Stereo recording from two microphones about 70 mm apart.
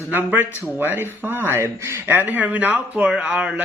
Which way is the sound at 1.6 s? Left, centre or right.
Right.